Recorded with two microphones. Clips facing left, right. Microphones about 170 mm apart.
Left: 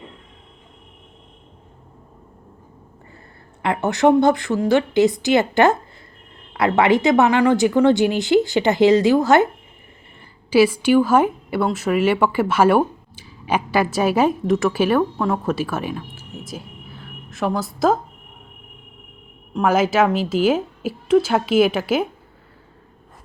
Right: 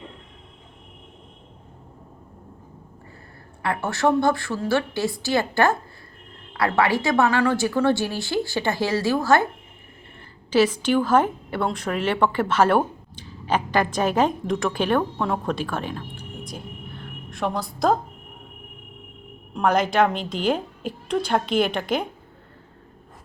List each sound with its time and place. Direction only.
3.6 s speech: 20° left (ahead or behind)
10.5 s a woman's voice: 10° left (ahead or behind)
19.5 s a woman's voice: 5° left (ahead or behind)